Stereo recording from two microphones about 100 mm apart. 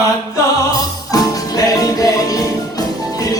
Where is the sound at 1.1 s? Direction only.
40° left (ahead or behind).